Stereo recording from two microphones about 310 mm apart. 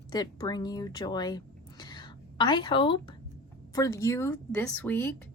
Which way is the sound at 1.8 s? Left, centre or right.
Centre.